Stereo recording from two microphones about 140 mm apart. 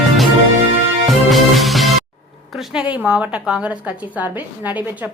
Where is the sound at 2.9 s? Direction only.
10° right (ahead or behind).